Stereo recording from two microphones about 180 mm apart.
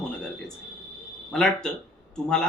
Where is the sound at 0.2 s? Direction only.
5° left (ahead or behind).